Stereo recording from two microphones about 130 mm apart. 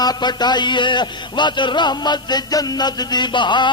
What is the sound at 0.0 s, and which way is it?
A man's voice, 30° left (ahead or behind).